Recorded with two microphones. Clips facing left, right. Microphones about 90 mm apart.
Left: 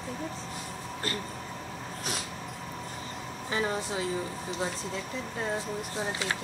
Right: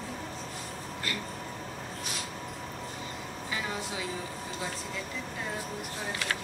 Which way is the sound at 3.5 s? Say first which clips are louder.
Left 5 dB; 35° left (ahead or behind).